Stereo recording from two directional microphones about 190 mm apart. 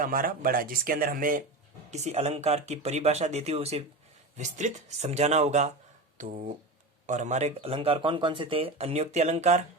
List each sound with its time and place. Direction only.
0.0 s speech: 50° right (ahead or behind)
1.9 s speech: 35° right (ahead or behind)